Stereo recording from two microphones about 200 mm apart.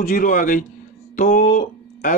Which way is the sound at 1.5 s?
40° left (ahead or behind).